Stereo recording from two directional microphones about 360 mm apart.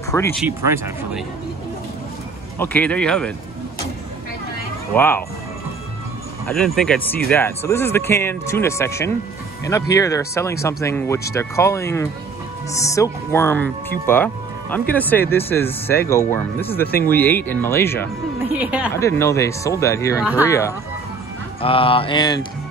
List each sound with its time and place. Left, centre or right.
0.1 s speech: centre
0.5 s speech: centre
2.6 s speech: centre
4.9 s speech: centre
6.4 s speech: centre
18.5 s a woman's voice: centre
18.9 s speech: centre